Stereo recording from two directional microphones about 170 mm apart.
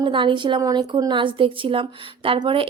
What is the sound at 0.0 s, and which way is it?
A woman's voice, 30° right (ahead or behind).